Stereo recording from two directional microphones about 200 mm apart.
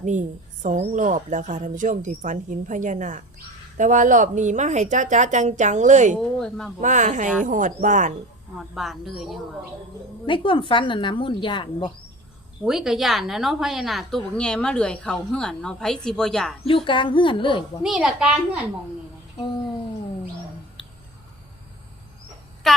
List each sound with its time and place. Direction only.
0.0 s a woman's voice: 40° right (ahead or behind)
6.1 s a woman's voice: centre (ahead or behind)
6.8 s a woman's voice: 40° right (ahead or behind)
8.5 s a woman's voice: centre (ahead or behind)
10.2 s a woman's voice: 25° left (ahead or behind)
12.6 s a woman's voice: centre (ahead or behind)
16.6 s a woman's voice: 25° left (ahead or behind)
17.8 s a woman's voice: 5° right (ahead or behind)
22.6 s child singing: centre (ahead or behind)